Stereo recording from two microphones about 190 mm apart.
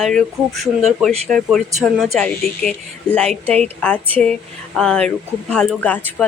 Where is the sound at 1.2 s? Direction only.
5° left (ahead or behind).